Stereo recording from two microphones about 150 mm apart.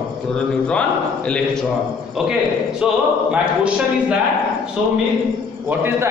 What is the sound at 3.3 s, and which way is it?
Speech, 5° right (ahead or behind).